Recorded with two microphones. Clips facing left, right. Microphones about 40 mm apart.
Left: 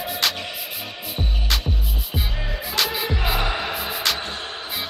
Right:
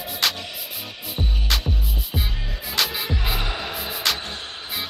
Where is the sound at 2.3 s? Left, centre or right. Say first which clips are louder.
Left 5 dB; left.